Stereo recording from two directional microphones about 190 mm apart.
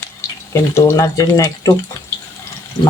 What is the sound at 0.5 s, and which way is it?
Speech, 15° left (ahead or behind).